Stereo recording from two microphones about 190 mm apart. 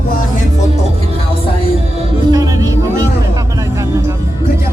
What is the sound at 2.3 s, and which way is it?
Music, 20° right (ahead or behind).